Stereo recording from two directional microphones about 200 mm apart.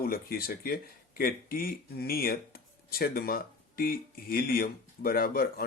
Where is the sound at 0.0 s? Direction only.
50° left (ahead or behind).